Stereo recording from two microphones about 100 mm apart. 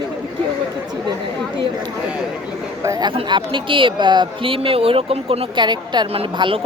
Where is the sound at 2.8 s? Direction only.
30° right (ahead or behind).